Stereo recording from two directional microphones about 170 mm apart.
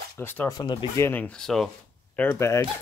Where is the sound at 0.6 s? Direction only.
25° left (ahead or behind).